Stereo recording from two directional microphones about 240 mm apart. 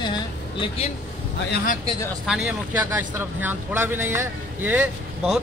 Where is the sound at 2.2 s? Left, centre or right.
Centre.